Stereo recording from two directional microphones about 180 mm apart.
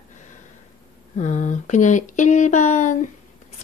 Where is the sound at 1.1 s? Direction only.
45° left (ahead or behind).